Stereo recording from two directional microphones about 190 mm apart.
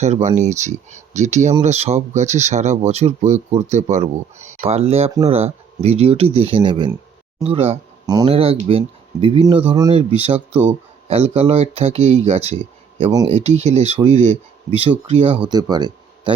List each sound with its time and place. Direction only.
0.0 s speech: 35° right (ahead or behind)
13.0 s speech: 20° right (ahead or behind)
13.2 s speech: 35° right (ahead or behind)